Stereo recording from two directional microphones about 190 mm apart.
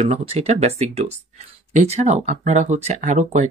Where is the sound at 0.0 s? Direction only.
35° right (ahead or behind).